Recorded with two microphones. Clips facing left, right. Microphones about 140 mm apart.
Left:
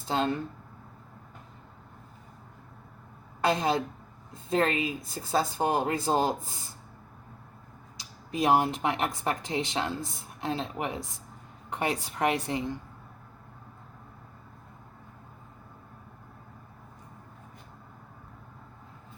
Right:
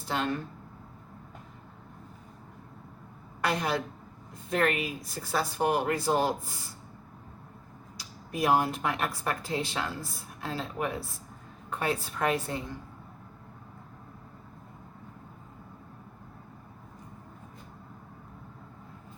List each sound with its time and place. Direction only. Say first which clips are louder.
0.1 s speech: left 3 dB; 25° left (ahead or behind)
3.4 s speech: left 3 dB; 25° left (ahead or behind)
7.9 s a woman's voice: left 3 dB; 20° left (ahead or behind)